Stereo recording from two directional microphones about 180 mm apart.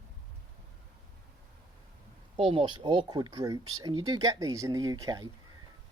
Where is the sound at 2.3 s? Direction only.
30° right (ahead or behind).